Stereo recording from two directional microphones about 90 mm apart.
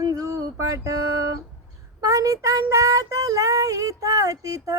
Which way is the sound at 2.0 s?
40° right (ahead or behind).